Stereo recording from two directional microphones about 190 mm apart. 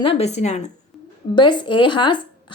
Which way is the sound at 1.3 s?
25° left (ahead or behind).